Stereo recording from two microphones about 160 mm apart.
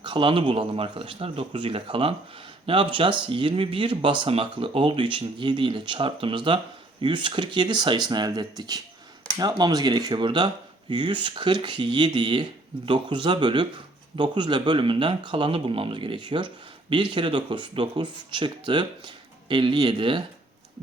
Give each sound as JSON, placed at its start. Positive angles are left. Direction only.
{"t": 0.0, "sound": "speech", "side_deg": -30}